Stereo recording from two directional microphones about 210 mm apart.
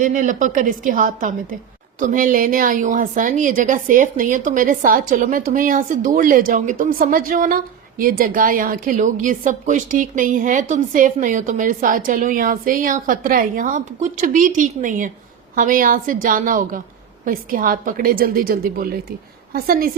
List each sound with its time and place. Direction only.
0.0 s a woman's voice: 35° right (ahead or behind)